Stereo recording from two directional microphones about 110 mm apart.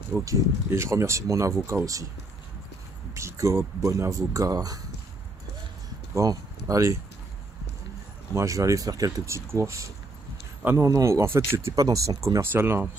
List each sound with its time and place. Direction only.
0.2 s speech: 25° right (ahead or behind)
3.2 s speech: 25° right (ahead or behind)
6.1 s speech: 30° right (ahead or behind)
8.4 s speech: 30° right (ahead or behind)